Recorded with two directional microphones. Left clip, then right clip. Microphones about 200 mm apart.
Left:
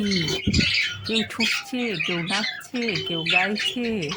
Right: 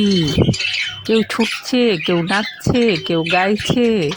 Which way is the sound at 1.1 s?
40° right (ahead or behind).